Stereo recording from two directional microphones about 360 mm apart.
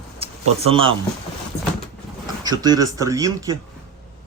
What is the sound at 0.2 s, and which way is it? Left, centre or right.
Speech, centre.